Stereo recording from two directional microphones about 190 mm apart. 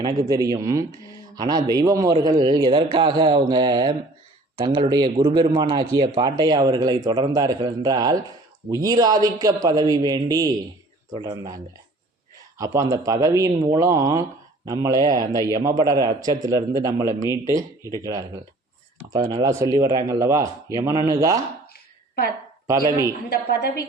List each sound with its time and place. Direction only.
0.0 s a man's voice: 20° right (ahead or behind)
22.9 s speech: 15° right (ahead or behind)
23.3 s a woman's voice: 60° left (ahead or behind)